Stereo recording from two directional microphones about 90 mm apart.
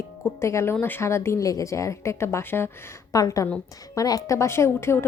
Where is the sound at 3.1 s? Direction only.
40° left (ahead or behind).